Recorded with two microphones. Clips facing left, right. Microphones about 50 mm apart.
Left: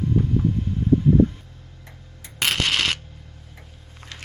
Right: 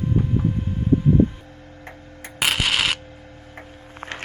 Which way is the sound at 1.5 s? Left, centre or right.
Right.